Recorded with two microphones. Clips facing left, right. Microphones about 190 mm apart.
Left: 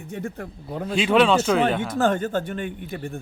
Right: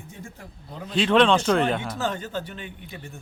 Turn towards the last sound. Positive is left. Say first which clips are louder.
# left 9 dB
turn(degrees=55)  # may be behind; listen again after turning